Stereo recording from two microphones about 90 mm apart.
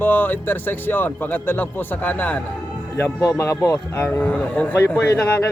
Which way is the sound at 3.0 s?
35° left (ahead or behind).